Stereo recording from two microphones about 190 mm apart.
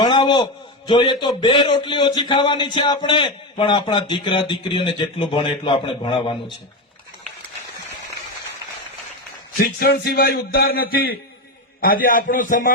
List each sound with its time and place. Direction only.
0.0 s a sound: 25° left (ahead or behind)
0.9 s a man's voice: 25° left (ahead or behind)
9.7 s speech: 55° left (ahead or behind)